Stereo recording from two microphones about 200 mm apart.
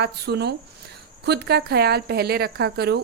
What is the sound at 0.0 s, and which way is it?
Speech, 55° right (ahead or behind).